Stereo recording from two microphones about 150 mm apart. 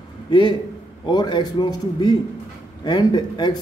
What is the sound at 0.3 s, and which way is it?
A man's voice, 30° left (ahead or behind).